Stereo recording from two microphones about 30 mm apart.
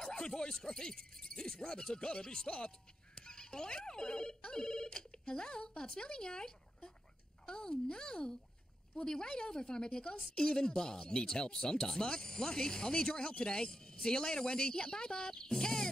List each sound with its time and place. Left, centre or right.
0.1 s speech: left